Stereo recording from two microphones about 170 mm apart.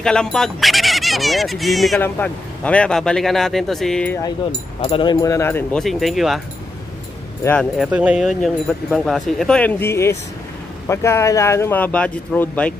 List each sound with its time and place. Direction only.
0.0 s speech: 5° left (ahead or behind)
2.0 s speech: 10° left (ahead or behind)
4.8 s speech: 30° left (ahead or behind); by 6.4 s centre (ahead or behind)
7.4 s speech: 5° left (ahead or behind)